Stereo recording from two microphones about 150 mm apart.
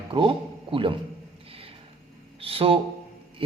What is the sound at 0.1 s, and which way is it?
Speech, 35° right (ahead or behind).